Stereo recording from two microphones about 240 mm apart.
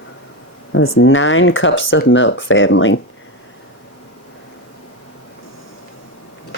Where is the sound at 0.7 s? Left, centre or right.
Left.